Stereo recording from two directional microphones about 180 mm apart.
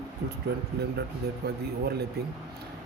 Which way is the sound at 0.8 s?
65° right (ahead or behind).